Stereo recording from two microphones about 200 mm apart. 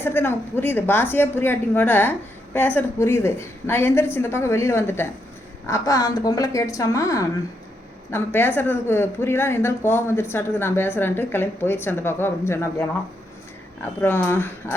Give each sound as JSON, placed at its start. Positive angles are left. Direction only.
{"t": 0.0, "sound": "a woman's voice", "side_deg": 10}
{"t": 14.0, "sound": "a woman's voice", "side_deg": 10}